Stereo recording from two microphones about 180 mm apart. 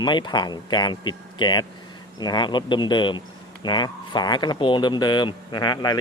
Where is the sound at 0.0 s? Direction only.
25° left (ahead or behind).